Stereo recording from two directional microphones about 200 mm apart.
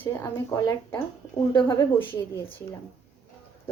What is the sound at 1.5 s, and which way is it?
Speech, 25° left (ahead or behind).